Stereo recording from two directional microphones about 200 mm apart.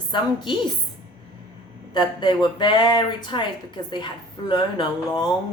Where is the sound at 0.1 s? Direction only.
25° left (ahead or behind).